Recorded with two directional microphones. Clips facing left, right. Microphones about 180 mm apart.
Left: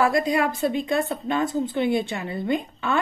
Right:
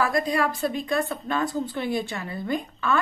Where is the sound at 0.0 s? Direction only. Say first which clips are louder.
Left 3 dB; 25° left (ahead or behind).